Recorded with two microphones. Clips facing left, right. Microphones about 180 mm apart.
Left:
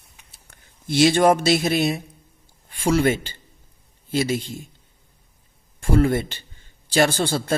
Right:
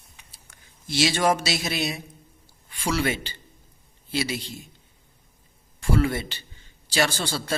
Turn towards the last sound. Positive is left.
turn(degrees=50)  # may be behind; listen again after turning